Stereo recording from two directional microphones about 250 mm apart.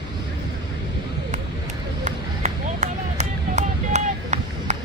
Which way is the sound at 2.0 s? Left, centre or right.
Right.